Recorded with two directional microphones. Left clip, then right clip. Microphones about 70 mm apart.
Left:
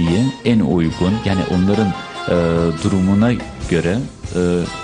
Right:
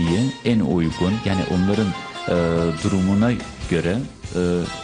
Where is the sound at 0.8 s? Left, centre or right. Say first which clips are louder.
Left 4 dB; right.